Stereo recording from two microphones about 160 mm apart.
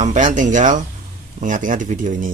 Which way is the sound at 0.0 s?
50° right (ahead or behind).